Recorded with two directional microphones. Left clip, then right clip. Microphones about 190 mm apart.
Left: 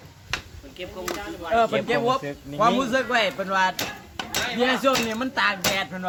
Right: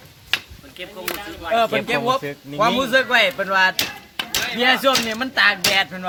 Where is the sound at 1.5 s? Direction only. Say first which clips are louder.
Right 2 dB; 30° right (ahead or behind).